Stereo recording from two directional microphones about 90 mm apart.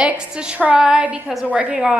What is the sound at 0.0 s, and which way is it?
A woman's voice, 10° right (ahead or behind).